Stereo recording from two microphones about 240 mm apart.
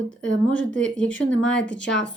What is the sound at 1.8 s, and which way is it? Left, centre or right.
Speech, left.